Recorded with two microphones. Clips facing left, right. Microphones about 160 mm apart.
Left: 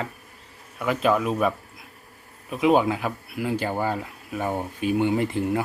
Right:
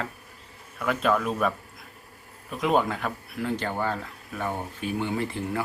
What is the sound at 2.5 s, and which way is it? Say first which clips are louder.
Speech: left 4 dB; 5° left (ahead or behind).